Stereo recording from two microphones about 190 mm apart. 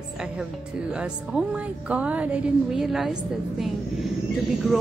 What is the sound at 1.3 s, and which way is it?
A woman's voice, 5° right (ahead or behind).